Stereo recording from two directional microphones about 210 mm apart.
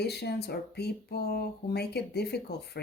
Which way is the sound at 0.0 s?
50° left (ahead or behind).